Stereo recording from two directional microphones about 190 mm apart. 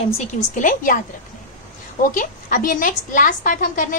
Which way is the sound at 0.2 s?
45° left (ahead or behind).